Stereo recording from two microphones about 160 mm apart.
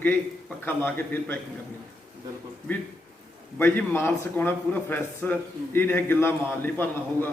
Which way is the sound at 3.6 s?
15° left (ahead or behind).